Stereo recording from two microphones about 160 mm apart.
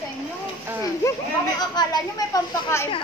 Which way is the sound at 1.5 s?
25° left (ahead or behind).